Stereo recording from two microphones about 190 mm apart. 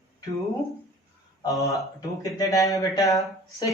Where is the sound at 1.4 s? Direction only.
15° left (ahead or behind).